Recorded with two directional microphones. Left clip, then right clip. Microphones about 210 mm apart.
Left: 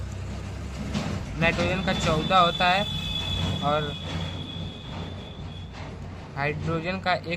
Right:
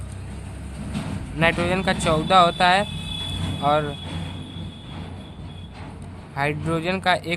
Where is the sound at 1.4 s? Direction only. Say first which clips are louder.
Right 4 dB; 35° right (ahead or behind).